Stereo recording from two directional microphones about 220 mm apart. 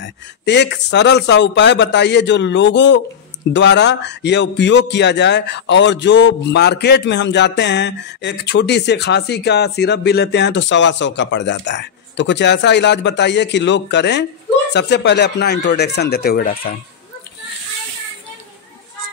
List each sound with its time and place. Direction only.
0.0 s a man's voice: 50° left (ahead or behind)